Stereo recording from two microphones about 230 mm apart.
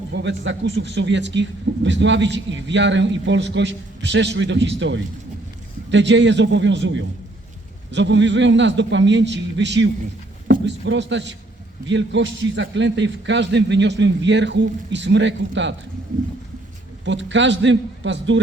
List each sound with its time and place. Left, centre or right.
0.1 s a man's voice: right
17.1 s a man's voice: right